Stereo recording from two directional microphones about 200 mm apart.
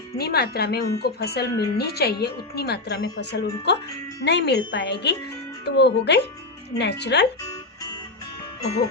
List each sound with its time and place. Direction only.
0.2 s a woman's voice: 55° left (ahead or behind)